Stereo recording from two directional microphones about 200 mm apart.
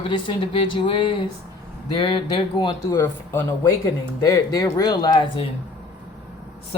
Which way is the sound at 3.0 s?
15° left (ahead or behind).